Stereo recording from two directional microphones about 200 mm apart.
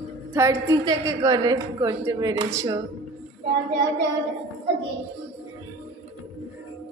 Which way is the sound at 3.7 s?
60° right (ahead or behind).